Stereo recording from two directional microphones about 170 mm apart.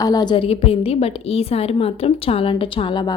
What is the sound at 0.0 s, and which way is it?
A woman's voice, 20° left (ahead or behind).